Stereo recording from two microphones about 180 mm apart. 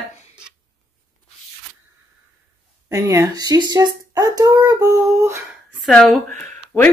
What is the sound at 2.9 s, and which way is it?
A child's voice, 15° right (ahead or behind).